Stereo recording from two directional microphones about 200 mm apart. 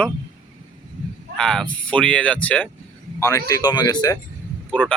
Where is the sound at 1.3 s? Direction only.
5° left (ahead or behind).